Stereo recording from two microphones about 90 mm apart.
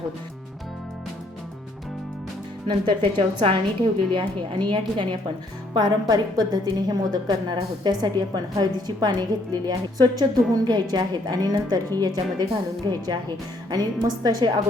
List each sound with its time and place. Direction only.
2.6 s a woman's voice: 70° right (ahead or behind)
4.1 s a woman's voice: 60° right (ahead or behind)